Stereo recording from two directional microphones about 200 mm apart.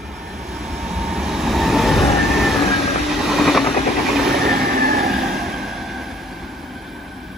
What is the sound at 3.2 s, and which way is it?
Vehicle, centre (ahead or behind).